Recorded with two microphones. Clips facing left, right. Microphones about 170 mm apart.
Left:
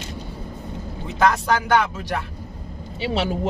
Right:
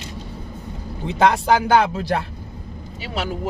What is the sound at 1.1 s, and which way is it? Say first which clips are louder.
Speech: right 3 dB; 30° right (ahead or behind).